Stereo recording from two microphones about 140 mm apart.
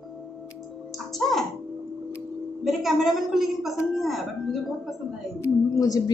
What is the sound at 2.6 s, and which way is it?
A woman's voice, centre (ahead or behind).